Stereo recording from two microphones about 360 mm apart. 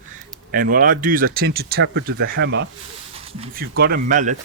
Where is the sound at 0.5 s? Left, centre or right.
Right.